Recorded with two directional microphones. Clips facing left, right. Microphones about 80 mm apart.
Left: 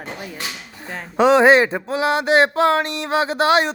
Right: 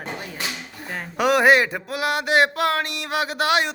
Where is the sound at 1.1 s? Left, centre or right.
Left.